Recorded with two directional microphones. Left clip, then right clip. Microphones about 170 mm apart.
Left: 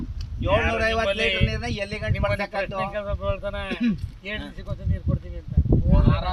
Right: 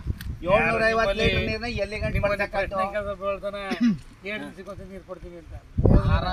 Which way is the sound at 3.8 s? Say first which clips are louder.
Right 2 dB; 55° left (ahead or behind).